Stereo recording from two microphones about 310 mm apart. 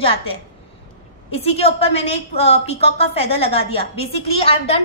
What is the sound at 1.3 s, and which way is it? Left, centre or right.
A woman's voice, centre.